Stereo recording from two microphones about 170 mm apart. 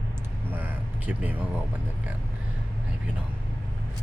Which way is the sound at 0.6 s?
10° right (ahead or behind).